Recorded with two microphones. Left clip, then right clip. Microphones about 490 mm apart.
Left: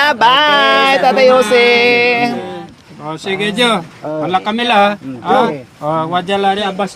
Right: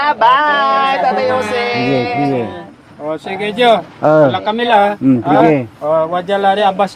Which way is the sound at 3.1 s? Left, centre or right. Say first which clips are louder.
Left 2 dB; left.